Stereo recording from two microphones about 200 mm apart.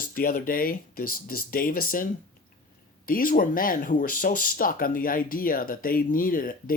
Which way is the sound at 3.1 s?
45° left (ahead or behind).